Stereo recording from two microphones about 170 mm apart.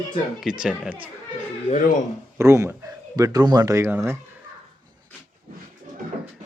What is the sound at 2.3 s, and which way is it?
Speech, 15° right (ahead or behind).